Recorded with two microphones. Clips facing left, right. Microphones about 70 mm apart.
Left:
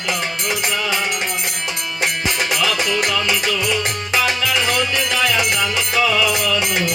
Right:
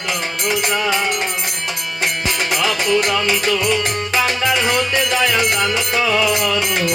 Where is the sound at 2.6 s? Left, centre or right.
Right.